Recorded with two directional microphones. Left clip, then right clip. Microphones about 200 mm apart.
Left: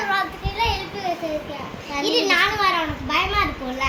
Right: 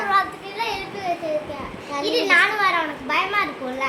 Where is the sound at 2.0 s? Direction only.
10° right (ahead or behind).